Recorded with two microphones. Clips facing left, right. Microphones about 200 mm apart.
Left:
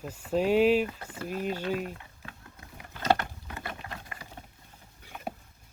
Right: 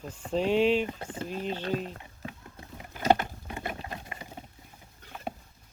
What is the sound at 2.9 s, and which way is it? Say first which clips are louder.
Patter: right 2 dB; 15° right (ahead or behind).